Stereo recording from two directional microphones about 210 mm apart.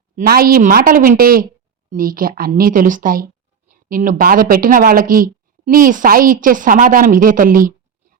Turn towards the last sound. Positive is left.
turn(degrees=-40)  # may be behind; listen again after turning